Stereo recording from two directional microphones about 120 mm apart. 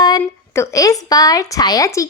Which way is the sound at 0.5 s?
25° left (ahead or behind).